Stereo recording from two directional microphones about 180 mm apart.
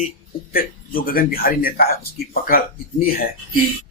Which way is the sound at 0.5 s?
55° left (ahead or behind).